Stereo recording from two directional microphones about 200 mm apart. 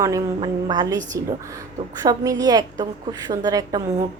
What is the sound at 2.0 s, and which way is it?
A woman's voice, 20° right (ahead or behind).